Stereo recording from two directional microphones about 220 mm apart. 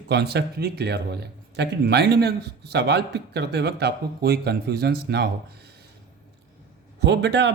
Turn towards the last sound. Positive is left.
turn(degrees=-50)  # may be behind; listen again after turning